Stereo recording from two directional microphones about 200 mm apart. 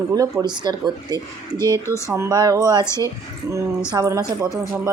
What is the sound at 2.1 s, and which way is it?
Speech, 20° right (ahead or behind).